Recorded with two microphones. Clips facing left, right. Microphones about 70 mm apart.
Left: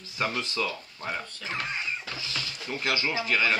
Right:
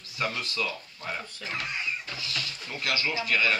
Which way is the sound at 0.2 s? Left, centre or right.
Left.